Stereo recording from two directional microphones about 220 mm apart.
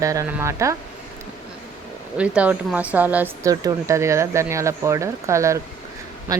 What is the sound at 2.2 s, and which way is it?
Speech, 5° right (ahead or behind).